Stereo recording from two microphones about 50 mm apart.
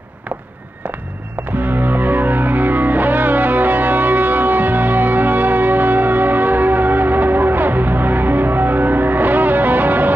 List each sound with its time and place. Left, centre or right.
1.6 s music: right